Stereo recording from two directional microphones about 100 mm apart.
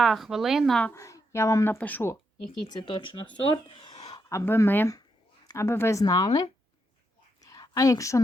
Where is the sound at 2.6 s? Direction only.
45° left (ahead or behind).